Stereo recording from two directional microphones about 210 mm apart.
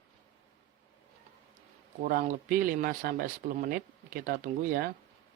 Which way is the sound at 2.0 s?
45° right (ahead or behind).